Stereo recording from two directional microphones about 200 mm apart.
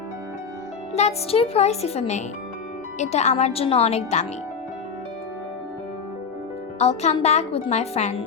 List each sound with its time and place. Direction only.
0.9 s a woman's voice: 30° left (ahead or behind)
6.7 s a woman's voice: 35° left (ahead or behind)